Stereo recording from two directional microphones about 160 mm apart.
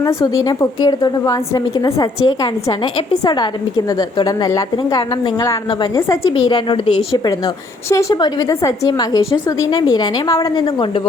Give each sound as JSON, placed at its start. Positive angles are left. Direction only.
{"t": 0.0, "sound": "a woman's voice", "side_deg": 20}